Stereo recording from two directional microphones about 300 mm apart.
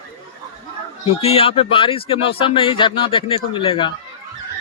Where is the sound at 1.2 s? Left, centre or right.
Centre.